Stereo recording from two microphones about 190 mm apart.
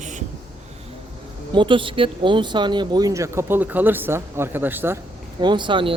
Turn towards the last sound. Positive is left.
turn(degrees=-25)  # may be behind; listen again after turning